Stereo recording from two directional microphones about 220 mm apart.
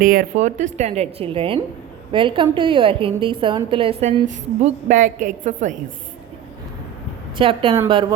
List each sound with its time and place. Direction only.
0.0 s a woman's voice: 40° right (ahead or behind)
7.3 s a woman's voice: 25° right (ahead or behind)